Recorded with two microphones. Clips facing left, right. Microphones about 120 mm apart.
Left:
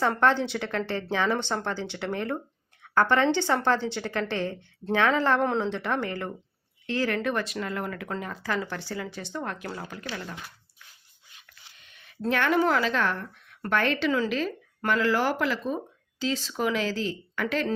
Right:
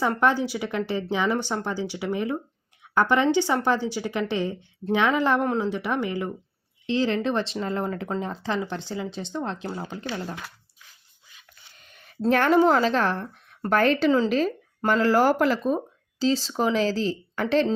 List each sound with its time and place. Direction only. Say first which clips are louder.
0.2 s a woman's voice: right 1 dB; 10° right (ahead or behind)
11.8 s a sound: right 3 dB; 40° right (ahead or behind)
12.2 s speech: right 5 dB; 40° right (ahead or behind)